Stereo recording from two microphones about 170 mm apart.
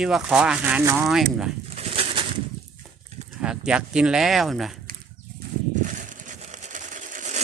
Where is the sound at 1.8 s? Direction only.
35° right (ahead or behind).